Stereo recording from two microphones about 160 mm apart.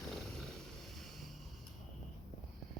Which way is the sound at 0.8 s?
Centre (ahead or behind).